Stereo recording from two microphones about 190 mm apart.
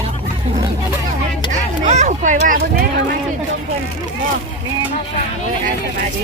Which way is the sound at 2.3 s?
50° right (ahead or behind).